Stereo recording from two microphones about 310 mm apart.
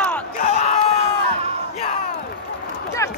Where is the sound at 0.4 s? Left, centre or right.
Left.